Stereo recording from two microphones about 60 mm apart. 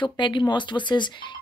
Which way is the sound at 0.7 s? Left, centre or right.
Left.